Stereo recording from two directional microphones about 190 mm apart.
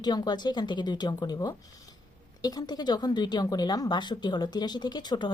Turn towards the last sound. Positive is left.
turn(degrees=20)  # may be behind; listen again after turning